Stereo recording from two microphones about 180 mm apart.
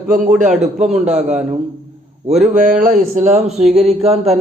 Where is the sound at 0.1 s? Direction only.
45° right (ahead or behind).